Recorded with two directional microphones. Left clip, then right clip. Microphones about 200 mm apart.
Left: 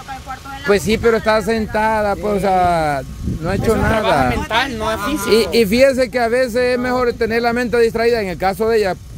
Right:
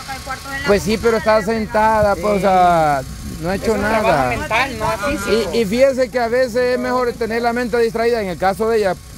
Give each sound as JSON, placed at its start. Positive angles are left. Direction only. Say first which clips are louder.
{"t": 0.7, "sound": "speech", "louder": "left 1 dB", "side_deg": 15}